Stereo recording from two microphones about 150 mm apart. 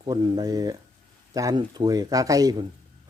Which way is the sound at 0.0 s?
25° right (ahead or behind).